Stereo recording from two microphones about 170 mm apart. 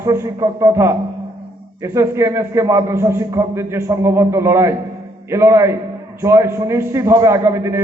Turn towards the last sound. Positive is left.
turn(degrees=-15)  # may be behind; listen again after turning